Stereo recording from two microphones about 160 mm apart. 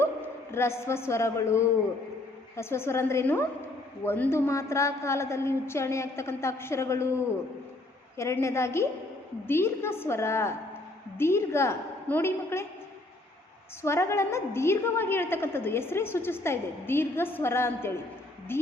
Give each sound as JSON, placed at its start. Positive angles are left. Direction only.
{"t": 0.5, "sound": "a woman's voice", "side_deg": 15}
{"t": 8.1, "sound": "a woman's voice", "side_deg": 15}
{"t": 13.8, "sound": "a woman's voice", "side_deg": 15}